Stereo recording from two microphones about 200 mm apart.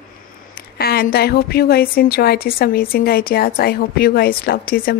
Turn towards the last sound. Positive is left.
turn(degrees=45)  # may be behind; listen again after turning